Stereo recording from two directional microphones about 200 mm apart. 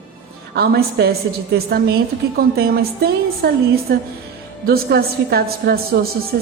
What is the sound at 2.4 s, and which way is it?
A woman's voice, 50° right (ahead or behind).